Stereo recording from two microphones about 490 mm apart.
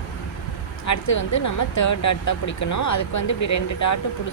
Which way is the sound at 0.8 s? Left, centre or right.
Left.